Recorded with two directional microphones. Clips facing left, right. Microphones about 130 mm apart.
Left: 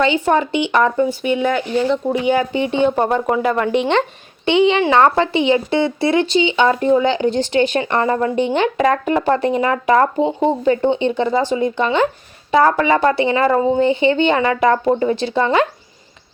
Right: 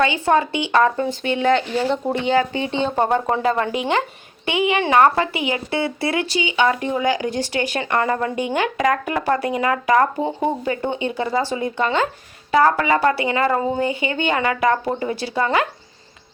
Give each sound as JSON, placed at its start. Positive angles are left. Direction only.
{"t": 0.3, "sound": "speech", "side_deg": 20}
{"t": 1.7, "sound": "speech", "side_deg": -35}
{"t": 2.1, "sound": "speech", "side_deg": 10}
{"t": 3.3, "sound": "speech", "side_deg": -30}
{"t": 4.4, "sound": "speech", "side_deg": 25}